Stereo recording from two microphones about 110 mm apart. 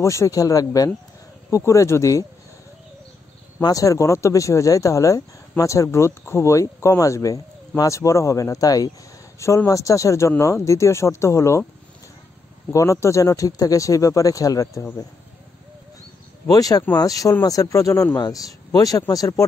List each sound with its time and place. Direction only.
0.0 s speech: 25° left (ahead or behind)
3.6 s speech: 30° left (ahead or behind)
12.7 s speech: 30° left (ahead or behind)
16.4 s speech: 35° left (ahead or behind)